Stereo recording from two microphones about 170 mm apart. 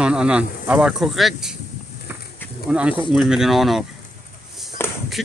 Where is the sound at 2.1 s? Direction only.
10° right (ahead or behind).